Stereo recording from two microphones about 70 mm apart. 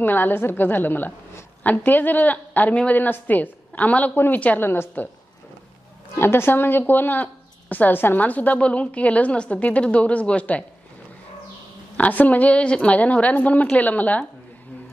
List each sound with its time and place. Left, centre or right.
0.0 s a woman's voice: left
4.1 s a woman's voice: left
6.1 s a woman's voice: left; by 10.6 s centre
12.0 s a woman's voice: left